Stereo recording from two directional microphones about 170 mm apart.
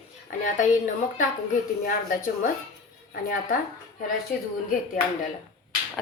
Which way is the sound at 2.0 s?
50° left (ahead or behind).